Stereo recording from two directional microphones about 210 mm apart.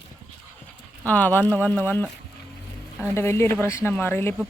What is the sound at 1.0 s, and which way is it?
A man's voice, 10° left (ahead or behind).